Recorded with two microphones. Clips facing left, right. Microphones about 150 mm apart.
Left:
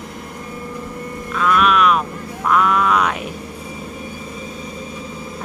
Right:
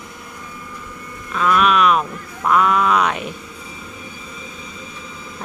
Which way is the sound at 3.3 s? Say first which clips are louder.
Left 6 dB; 45° left (ahead or behind).